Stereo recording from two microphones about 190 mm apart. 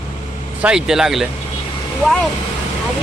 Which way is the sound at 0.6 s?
5° right (ahead or behind).